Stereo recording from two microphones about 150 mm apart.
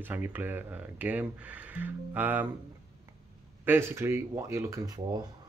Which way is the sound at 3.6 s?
15° right (ahead or behind).